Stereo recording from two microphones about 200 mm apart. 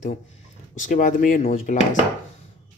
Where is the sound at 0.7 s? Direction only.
40° left (ahead or behind).